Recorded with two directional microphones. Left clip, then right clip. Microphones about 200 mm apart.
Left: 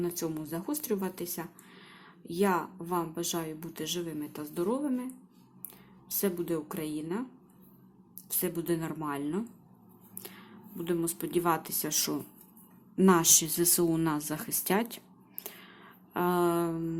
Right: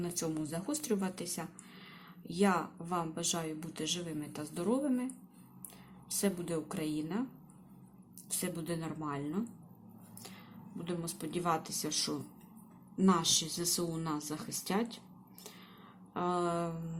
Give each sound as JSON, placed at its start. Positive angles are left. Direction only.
{"t": 0.0, "sound": "a woman's voice", "side_deg": 15}
{"t": 6.1, "sound": "a woman's voice", "side_deg": 15}
{"t": 8.3, "sound": "speech", "side_deg": 20}
{"t": 16.1, "sound": "speech", "side_deg": 25}